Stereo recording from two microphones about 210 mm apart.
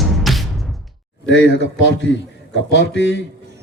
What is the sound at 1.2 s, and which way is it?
Speech, 60° left (ahead or behind).